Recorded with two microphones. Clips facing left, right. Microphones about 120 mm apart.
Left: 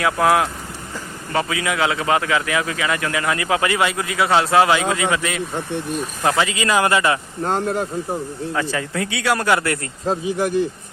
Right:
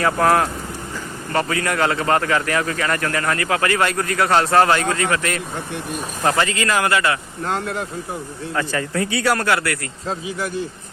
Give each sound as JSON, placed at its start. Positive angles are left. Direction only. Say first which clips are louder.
{"t": 0.0, "sound": "speech", "louder": "even", "side_deg": 5}
{"t": 7.4, "sound": "speech", "louder": "left 3 dB", "side_deg": 40}
{"t": 8.5, "sound": "speech", "louder": "right 2 dB", "side_deg": 5}
{"t": 9.4, "sound": "speech", "louder": "left 1 dB", "side_deg": 20}
{"t": 10.1, "sound": "speech", "louder": "left 5 dB", "side_deg": 45}